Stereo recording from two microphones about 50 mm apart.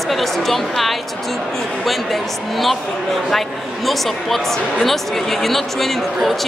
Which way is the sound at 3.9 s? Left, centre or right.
Centre.